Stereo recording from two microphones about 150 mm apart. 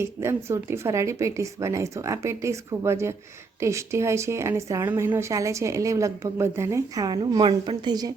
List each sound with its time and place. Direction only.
0.0 s a woman's voice: 15° right (ahead or behind)